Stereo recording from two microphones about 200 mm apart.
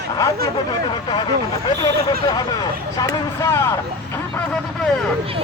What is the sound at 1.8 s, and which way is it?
Speech, 20° left (ahead or behind).